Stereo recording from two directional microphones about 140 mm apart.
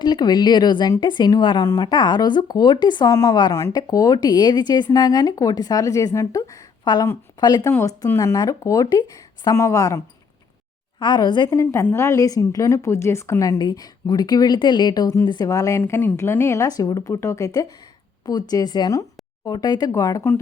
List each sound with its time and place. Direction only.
0.0 s a woman's voice: 30° left (ahead or behind)
11.0 s a woman's voice: 30° left (ahead or behind)
11.6 s a woman's voice: 20° left (ahead or behind)